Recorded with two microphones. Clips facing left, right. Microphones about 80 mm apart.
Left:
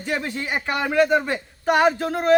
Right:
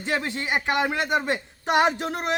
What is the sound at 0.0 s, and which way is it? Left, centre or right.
Speech, right.